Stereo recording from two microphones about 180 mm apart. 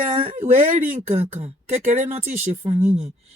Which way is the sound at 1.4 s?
40° right (ahead or behind).